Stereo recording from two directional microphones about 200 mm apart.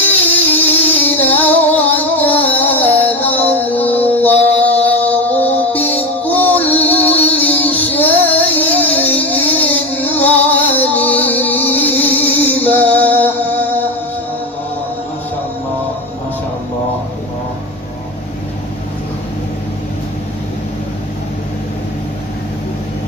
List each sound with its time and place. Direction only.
0.5 s music: 10° left (ahead or behind)